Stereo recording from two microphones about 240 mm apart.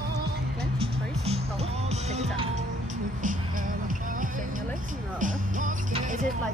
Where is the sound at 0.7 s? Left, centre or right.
Right.